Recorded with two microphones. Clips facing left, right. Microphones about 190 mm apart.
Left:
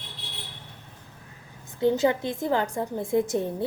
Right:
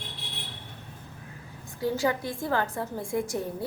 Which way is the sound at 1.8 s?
20° left (ahead or behind).